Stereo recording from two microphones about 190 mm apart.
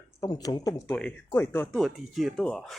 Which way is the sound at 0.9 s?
10° left (ahead or behind).